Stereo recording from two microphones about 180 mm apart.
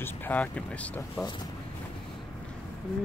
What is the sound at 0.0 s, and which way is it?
Speech, 10° left (ahead or behind).